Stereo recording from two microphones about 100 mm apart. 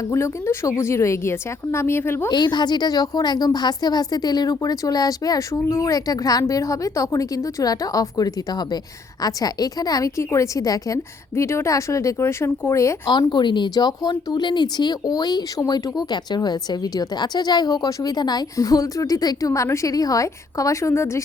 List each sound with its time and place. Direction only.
0.0 s speech: 30° left (ahead or behind)
2.3 s speech: 45° left (ahead or behind); by 13.0 s 30° left (ahead or behind)
13.3 s speech: 50° left (ahead or behind); by 21.2 s 25° left (ahead or behind)